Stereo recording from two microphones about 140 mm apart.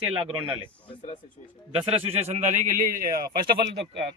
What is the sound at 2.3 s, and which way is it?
Speech, 60° right (ahead or behind).